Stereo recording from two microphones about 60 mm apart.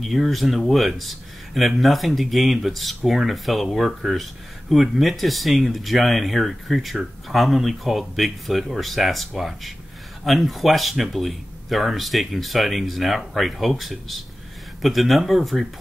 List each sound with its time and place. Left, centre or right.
0.0 s speech: centre